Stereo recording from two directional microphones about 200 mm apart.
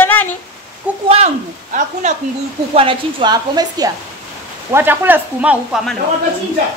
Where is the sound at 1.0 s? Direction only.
30° right (ahead or behind); by 5.9 s 5° right (ahead or behind).